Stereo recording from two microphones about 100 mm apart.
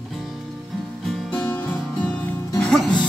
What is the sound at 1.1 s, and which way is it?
Music, 10° left (ahead or behind).